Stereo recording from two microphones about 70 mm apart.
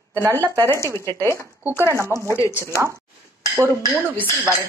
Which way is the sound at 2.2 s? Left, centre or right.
Left.